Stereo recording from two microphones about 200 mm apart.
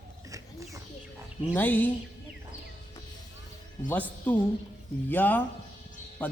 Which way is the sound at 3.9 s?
10° left (ahead or behind).